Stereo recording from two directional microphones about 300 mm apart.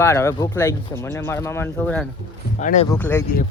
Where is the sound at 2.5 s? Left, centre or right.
Left.